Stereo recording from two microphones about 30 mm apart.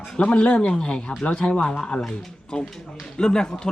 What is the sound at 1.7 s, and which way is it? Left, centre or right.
Speech, centre.